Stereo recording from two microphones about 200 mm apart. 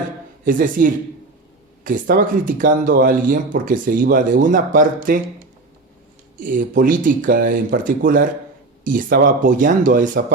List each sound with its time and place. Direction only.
0.4 s speech: 45° right (ahead or behind)
6.3 s speech: 40° right (ahead or behind)